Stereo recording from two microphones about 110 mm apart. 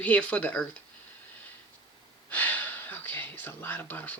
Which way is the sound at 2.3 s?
15° left (ahead or behind).